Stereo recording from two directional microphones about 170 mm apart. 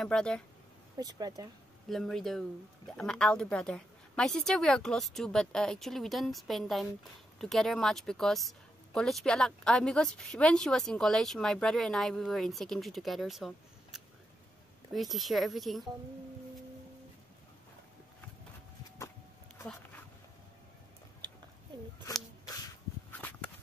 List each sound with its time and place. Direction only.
0.0 s a woman's voice: 5° left (ahead or behind)
0.9 s speech: 25° right (ahead or behind)
1.9 s a woman's voice: centre (ahead or behind)